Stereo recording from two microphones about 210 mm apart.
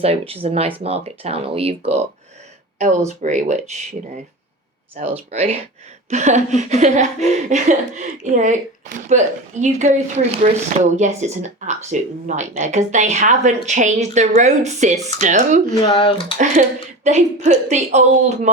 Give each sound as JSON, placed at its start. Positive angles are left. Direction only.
{"t": 0.0, "sound": "speech", "side_deg": -30}
{"t": 3.2, "sound": "speech", "side_deg": -35}
{"t": 4.9, "sound": "speech", "side_deg": -30}
{"t": 15.8, "sound": "speech", "side_deg": 25}
{"t": 16.4, "sound": "speech", "side_deg": -35}